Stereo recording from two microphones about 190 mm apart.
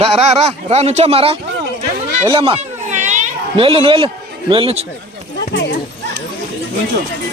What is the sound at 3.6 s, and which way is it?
A man's voice, 30° right (ahead or behind).